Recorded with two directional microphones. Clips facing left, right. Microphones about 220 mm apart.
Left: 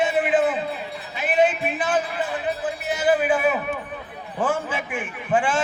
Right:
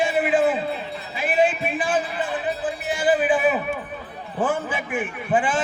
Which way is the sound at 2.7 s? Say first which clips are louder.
Even; 20° left (ahead or behind).